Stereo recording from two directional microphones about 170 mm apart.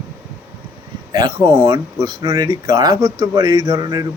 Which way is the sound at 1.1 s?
20° right (ahead or behind).